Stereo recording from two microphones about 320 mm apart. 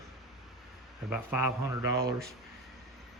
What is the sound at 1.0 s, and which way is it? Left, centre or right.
Speech, centre.